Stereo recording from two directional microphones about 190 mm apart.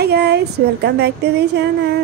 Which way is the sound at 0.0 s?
60° right (ahead or behind).